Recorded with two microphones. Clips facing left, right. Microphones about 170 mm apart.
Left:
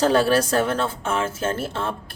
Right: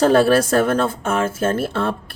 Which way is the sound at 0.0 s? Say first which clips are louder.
Right 4 dB; 55° right (ahead or behind).